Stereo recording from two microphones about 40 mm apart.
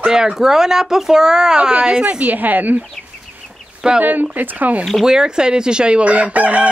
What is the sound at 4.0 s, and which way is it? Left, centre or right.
Speech, right.